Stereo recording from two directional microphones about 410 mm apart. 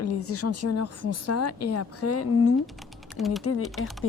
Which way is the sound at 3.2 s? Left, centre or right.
Centre.